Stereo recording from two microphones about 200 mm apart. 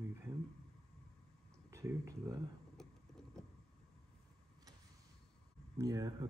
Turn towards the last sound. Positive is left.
turn(degrees=-15)  # may be behind; listen again after turning